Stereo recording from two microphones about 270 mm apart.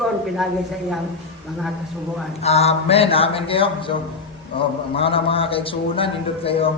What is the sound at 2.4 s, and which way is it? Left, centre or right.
A man's voice, left.